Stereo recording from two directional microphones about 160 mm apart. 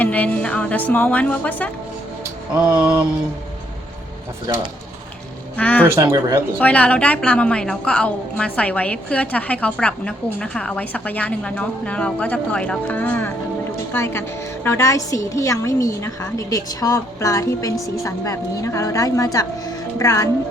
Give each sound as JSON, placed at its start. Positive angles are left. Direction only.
{"t": 0.0, "sound": "a woman's voice", "side_deg": 10}
{"t": 2.6, "sound": "speech", "side_deg": -10}
{"t": 5.5, "sound": "a woman's voice", "side_deg": 10}
{"t": 5.8, "sound": "speech", "side_deg": -15}
{"t": 6.6, "sound": "a woman's voice", "side_deg": 10}